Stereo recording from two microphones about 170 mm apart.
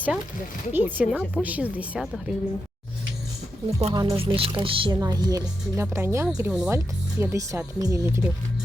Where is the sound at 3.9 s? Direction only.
25° right (ahead or behind).